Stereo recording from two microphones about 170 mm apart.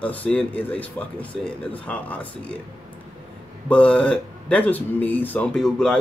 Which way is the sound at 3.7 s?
5° left (ahead or behind).